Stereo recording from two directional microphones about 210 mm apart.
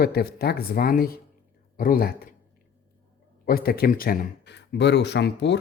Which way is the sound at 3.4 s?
45° left (ahead or behind).